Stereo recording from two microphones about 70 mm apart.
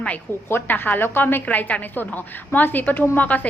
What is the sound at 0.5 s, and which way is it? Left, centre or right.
A woman's voice, left.